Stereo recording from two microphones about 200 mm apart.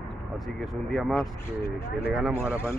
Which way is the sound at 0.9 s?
Centre (ahead or behind).